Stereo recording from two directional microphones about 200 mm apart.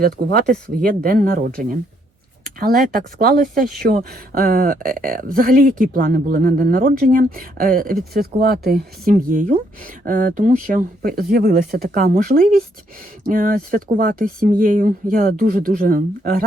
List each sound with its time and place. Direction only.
0.0 s speech: 50° right (ahead or behind)